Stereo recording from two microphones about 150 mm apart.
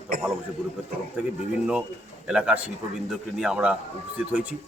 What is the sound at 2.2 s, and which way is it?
Speech, 5° right (ahead or behind).